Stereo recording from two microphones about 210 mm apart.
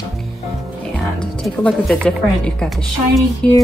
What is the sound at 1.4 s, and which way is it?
A woman's voice, 5° left (ahead or behind).